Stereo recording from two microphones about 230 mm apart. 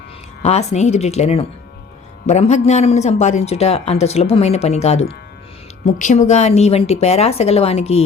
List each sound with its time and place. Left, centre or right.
0.4 s speech: left